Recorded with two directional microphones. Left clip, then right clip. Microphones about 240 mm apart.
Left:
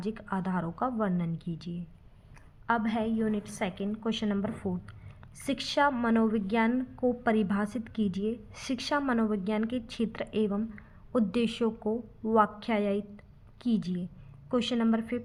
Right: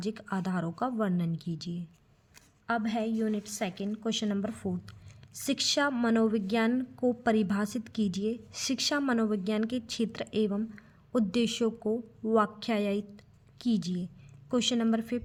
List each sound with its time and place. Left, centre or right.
0.0 s a woman's voice: right
2.6 s a woman's voice: right